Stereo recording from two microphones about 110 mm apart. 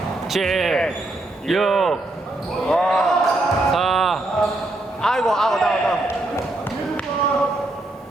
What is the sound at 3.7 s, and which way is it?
Basketball bounce, centre (ahead or behind).